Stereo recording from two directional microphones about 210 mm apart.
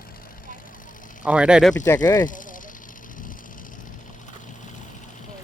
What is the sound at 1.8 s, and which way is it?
Speech, 15° left (ahead or behind).